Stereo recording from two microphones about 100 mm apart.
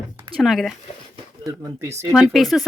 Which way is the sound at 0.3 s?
Centre (ahead or behind).